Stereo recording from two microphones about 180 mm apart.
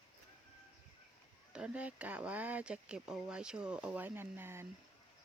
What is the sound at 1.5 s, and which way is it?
Speech, 5° right (ahead or behind).